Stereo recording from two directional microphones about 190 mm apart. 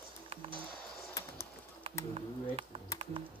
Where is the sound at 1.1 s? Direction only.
15° left (ahead or behind).